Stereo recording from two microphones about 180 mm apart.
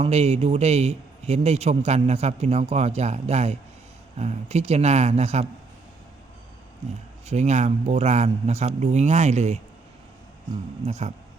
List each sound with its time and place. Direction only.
0.0 s a man's voice: 35° right (ahead or behind)
7.3 s a man's voice: 40° right (ahead or behind)
10.8 s a man's voice: 35° right (ahead or behind)